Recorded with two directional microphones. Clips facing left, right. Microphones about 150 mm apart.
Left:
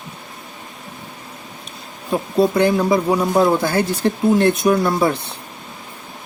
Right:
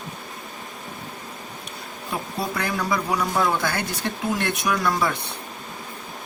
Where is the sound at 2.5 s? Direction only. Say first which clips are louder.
Left 10 dB; 25° left (ahead or behind).